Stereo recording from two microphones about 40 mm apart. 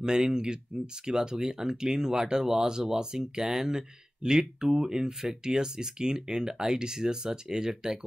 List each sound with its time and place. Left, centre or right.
0.0 s speech: centre